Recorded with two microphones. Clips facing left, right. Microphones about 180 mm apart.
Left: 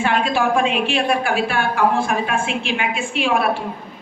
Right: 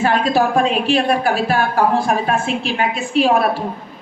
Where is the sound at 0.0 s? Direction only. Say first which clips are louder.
Right 3 dB; 40° right (ahead or behind).